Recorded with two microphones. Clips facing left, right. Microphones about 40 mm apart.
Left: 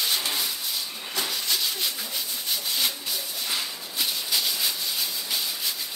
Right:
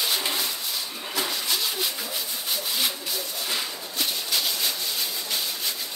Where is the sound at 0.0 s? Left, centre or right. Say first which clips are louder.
Right 1 dB; centre.